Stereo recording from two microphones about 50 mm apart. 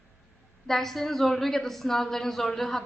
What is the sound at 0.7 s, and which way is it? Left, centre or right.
A woman's voice, centre.